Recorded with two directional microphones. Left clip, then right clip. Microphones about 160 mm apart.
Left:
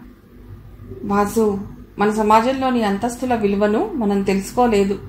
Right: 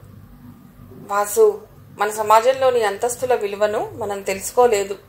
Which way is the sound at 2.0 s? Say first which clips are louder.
Left 1 dB; 40° right (ahead or behind).